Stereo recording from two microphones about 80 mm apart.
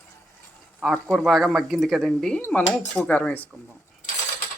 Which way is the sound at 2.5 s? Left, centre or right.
Centre.